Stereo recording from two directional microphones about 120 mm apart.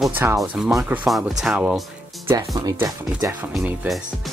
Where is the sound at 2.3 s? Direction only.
25° right (ahead or behind).